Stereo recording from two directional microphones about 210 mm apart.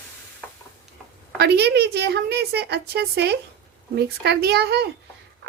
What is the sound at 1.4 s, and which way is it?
Speech, 50° right (ahead or behind).